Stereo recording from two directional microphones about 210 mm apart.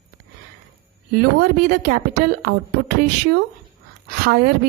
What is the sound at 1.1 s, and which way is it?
A woman's voice, 45° right (ahead or behind).